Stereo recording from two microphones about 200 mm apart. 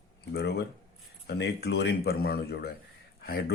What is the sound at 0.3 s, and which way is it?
Speech, 55° left (ahead or behind).